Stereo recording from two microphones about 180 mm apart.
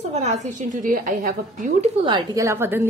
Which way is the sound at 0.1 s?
40° right (ahead or behind).